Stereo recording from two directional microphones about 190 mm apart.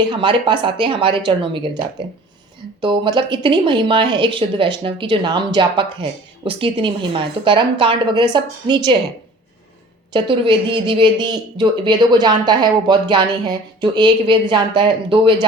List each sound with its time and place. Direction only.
0.1 s speech: 25° right (ahead or behind)
2.8 s speech: 25° right (ahead or behind)
10.1 s speech: 25° right (ahead or behind)